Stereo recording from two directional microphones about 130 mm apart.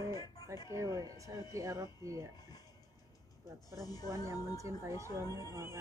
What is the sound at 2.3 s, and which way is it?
Speech, 30° left (ahead or behind).